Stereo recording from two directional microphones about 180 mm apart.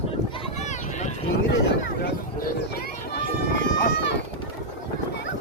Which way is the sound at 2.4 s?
60° left (ahead or behind).